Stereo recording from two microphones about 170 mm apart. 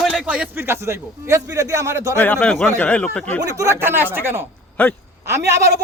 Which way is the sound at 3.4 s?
20° right (ahead or behind).